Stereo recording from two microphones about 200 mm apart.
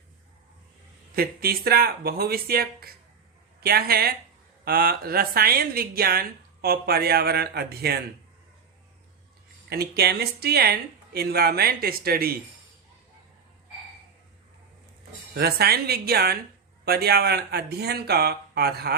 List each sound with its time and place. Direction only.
1.1 s speech: 50° right (ahead or behind)
9.6 s speech: 55° right (ahead or behind)
15.4 s speech: 50° right (ahead or behind)